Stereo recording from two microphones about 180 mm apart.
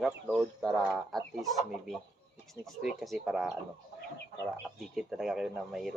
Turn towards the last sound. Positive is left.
turn(degrees=0)  # may be behind; listen again after turning